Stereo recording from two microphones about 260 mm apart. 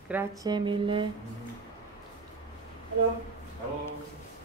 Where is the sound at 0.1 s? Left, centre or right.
Centre.